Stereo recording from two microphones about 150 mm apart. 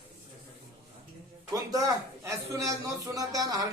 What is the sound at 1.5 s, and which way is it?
A man's voice, 25° right (ahead or behind).